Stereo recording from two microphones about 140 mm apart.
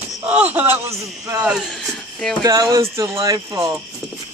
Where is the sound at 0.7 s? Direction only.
20° right (ahead or behind).